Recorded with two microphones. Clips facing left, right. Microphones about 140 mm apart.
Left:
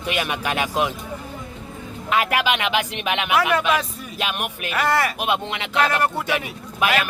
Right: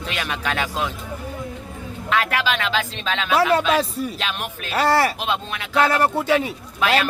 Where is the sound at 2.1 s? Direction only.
10° left (ahead or behind).